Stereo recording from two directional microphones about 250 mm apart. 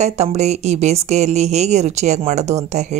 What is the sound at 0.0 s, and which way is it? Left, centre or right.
Speech, right.